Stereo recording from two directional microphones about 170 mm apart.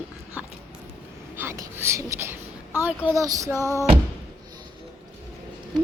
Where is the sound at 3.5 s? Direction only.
15° left (ahead or behind).